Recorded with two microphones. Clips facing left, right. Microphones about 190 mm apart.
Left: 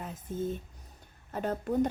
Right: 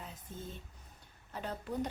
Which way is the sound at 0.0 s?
50° left (ahead or behind).